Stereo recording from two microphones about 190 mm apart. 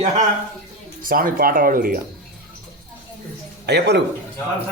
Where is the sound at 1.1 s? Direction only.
50° right (ahead or behind).